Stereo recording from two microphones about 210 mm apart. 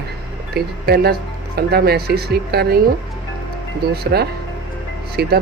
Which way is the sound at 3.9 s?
50° right (ahead or behind).